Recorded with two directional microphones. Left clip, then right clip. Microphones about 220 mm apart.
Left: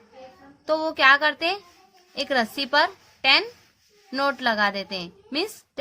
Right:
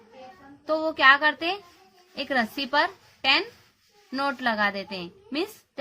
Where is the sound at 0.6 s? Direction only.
25° left (ahead or behind).